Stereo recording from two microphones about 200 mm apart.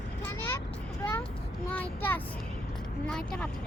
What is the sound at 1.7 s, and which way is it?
Child singing, 10° left (ahead or behind).